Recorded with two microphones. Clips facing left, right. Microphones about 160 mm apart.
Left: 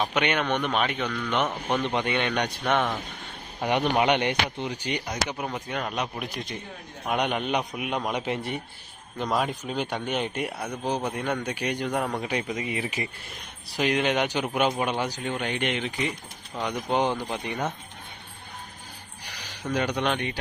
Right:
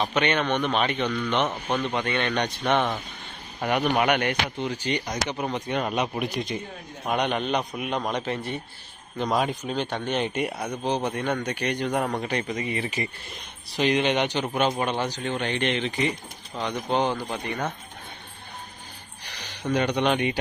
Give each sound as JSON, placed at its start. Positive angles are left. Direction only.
{"t": 0.0, "sound": "speech", "side_deg": 10}
{"t": 1.9, "sound": "speech", "side_deg": 15}
{"t": 3.7, "sound": "a man's voice", "side_deg": 20}
{"t": 19.6, "sound": "a man's voice", "side_deg": 5}
{"t": 20.1, "sound": "speech", "side_deg": -10}